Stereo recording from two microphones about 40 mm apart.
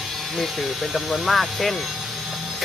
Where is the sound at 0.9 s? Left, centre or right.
Centre.